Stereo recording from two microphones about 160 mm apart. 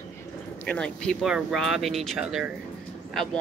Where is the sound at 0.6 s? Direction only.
5° left (ahead or behind).